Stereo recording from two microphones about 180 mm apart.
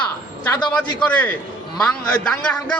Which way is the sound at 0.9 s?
5° left (ahead or behind).